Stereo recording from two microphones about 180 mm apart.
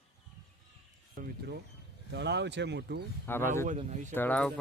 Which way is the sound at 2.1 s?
75° right (ahead or behind).